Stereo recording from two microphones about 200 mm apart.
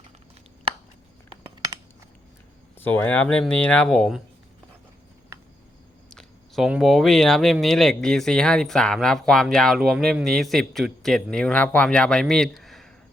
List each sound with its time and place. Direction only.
1.5 s a sound: 20° right (ahead or behind)
2.7 s speech: 10° left (ahead or behind)
6.1 s speech: centre (ahead or behind)